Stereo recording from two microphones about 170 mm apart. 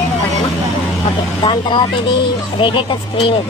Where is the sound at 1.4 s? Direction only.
30° left (ahead or behind).